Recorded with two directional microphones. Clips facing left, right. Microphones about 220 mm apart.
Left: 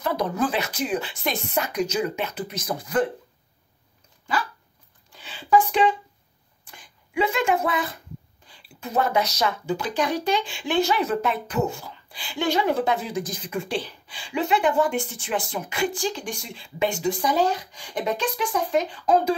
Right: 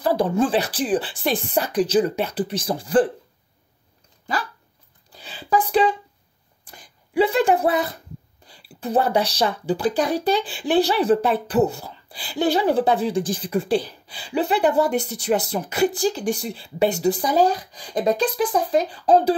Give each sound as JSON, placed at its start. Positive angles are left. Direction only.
{"t": 0.0, "sound": "speech", "side_deg": -30}
{"t": 5.1, "sound": "a sound", "side_deg": -40}
{"t": 8.5, "sound": "speech", "side_deg": -35}